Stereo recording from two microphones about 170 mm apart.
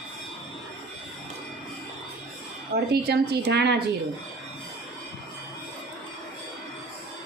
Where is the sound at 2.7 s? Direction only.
70° right (ahead or behind).